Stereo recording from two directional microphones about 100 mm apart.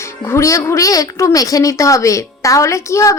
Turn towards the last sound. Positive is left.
turn(degrees=30)  # may be behind; listen again after turning